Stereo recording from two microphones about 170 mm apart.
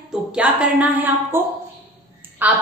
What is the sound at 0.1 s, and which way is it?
A woman's voice, 5° right (ahead or behind).